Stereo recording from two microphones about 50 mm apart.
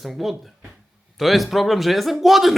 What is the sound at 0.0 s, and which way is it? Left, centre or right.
Speech, centre.